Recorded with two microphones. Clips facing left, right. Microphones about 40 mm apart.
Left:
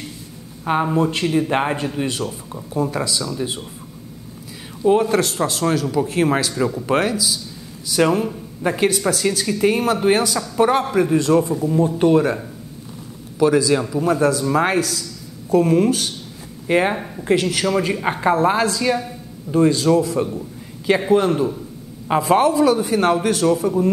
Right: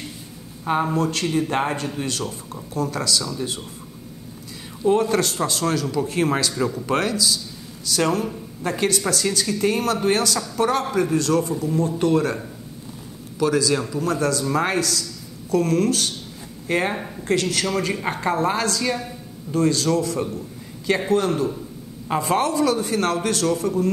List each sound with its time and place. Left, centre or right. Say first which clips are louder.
0.7 s a woman's voice: left 3 dB; centre
4.8 s a woman's voice: left 3 dB; centre
13.4 s a woman's voice: left 4 dB; centre